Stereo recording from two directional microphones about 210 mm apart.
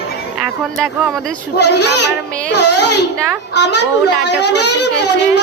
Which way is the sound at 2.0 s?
55° left (ahead or behind).